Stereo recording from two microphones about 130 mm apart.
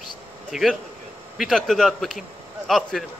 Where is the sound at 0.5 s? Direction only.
Centre (ahead or behind).